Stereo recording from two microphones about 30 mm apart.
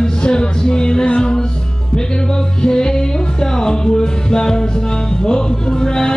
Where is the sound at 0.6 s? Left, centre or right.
Left.